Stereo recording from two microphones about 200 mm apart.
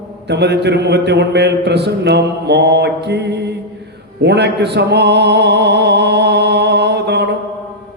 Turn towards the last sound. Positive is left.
turn(degrees=-55)  # may be behind; listen again after turning